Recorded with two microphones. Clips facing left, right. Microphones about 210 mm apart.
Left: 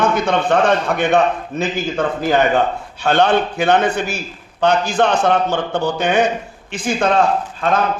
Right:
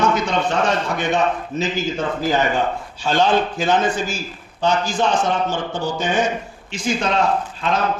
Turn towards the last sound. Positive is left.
turn(degrees=50)  # may be behind; listen again after turning